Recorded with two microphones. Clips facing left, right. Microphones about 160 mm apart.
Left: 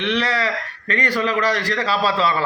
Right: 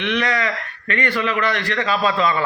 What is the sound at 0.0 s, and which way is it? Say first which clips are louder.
A man's voice: even; 35° left (ahead or behind).